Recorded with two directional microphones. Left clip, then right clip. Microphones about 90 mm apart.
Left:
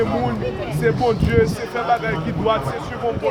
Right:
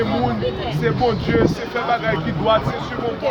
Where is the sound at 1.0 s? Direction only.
45° left (ahead or behind).